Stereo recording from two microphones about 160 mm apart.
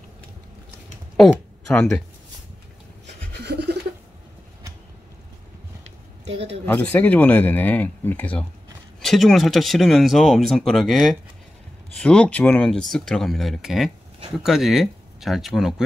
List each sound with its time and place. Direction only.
1.7 s speech: 5° left (ahead or behind)
3.3 s a sound: 90° right
6.3 s speech: 40° right (ahead or behind)
6.6 s speech: 10° left (ahead or behind)